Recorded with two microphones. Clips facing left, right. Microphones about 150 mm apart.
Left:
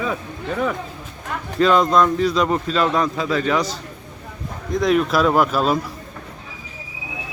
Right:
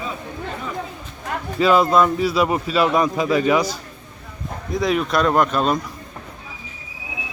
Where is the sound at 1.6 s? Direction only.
5° right (ahead or behind).